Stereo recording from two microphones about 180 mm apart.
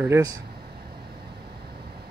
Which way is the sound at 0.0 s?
15° right (ahead or behind).